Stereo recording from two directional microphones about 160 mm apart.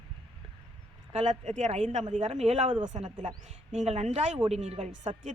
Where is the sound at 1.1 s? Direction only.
45° right (ahead or behind).